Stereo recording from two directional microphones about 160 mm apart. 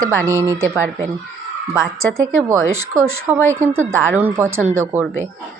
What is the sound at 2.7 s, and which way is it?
Speech, 15° right (ahead or behind).